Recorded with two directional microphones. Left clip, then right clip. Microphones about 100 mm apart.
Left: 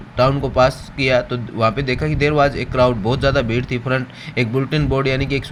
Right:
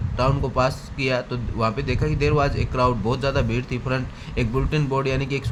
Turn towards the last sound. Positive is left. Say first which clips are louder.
# left 5 dB
turn(degrees=30)  # may be behind; listen again after turning